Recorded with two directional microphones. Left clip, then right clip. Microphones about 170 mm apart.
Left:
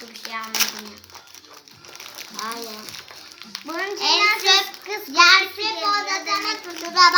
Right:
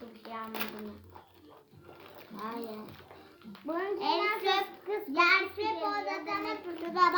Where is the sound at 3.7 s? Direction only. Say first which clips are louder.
Left 6 dB; 25° left (ahead or behind).